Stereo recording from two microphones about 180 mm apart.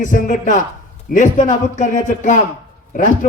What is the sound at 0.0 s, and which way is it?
A man's voice, 45° left (ahead or behind).